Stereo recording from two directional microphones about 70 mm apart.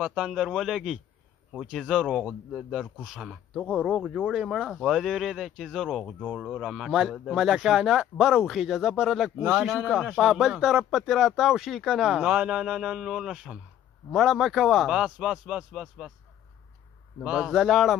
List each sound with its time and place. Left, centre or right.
0.1 s speech: centre
17.2 s speech: centre